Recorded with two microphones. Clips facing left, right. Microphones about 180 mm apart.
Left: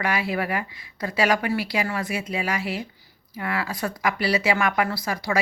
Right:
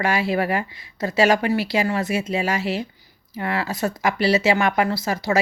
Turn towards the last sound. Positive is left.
turn(degrees=-25)  # may be behind; listen again after turning